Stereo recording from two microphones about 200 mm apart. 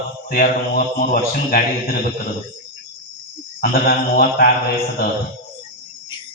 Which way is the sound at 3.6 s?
50° left (ahead or behind).